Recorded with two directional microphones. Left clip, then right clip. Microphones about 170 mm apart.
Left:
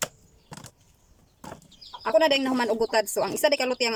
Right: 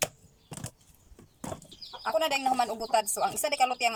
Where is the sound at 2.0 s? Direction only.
55° left (ahead or behind).